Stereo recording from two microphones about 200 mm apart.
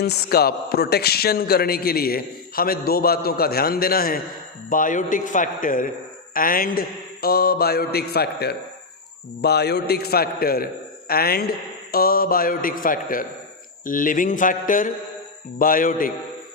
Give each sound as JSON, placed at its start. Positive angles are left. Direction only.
{"t": 0.0, "sound": "a man's voice", "side_deg": 50}